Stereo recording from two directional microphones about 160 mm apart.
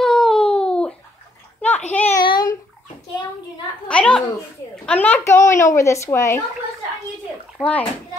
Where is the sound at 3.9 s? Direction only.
5° left (ahead or behind).